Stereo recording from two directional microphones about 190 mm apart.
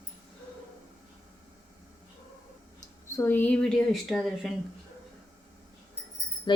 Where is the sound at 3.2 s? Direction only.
10° left (ahead or behind).